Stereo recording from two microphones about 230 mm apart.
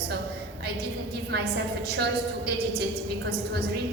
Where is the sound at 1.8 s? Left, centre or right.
Right.